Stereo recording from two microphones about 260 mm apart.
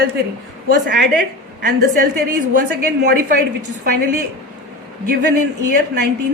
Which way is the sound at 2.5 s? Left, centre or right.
Right.